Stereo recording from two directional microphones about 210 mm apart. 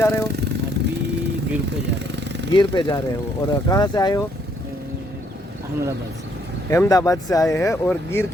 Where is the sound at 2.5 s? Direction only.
20° left (ahead or behind).